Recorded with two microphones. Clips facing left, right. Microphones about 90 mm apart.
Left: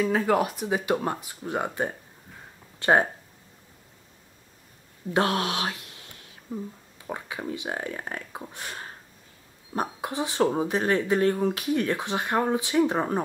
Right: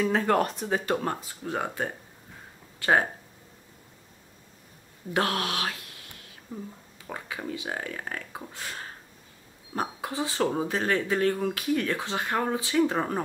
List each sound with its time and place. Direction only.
0.0 s speech: 5° left (ahead or behind); by 3.1 s 20° left (ahead or behind)
5.1 s speech: 20° left (ahead or behind)
7.1 s speech: 15° left (ahead or behind)